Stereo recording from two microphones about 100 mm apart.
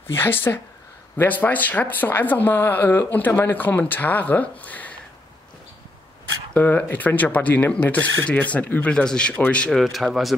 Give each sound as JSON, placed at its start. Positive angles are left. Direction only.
{"t": 0.0, "sound": "speech", "side_deg": 25}
{"t": 6.5, "sound": "speech", "side_deg": 15}
{"t": 9.7, "sound": "speech", "side_deg": 0}